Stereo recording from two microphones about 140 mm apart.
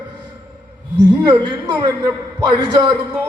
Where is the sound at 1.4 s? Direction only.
30° right (ahead or behind).